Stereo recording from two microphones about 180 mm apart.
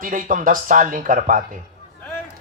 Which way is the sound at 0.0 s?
50° right (ahead or behind).